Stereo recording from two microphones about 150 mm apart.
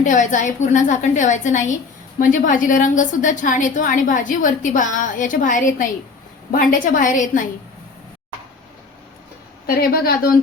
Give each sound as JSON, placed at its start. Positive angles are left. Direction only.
{"t": 0.0, "sound": "a woman's voice", "side_deg": 55}
{"t": 9.6, "sound": "a woman's voice", "side_deg": 80}